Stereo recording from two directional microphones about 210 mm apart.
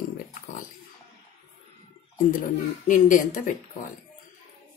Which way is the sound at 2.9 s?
40° left (ahead or behind).